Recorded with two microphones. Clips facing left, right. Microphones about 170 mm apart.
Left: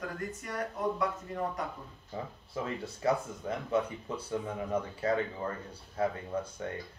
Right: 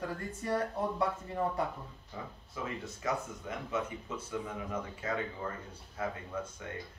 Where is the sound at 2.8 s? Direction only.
35° left (ahead or behind).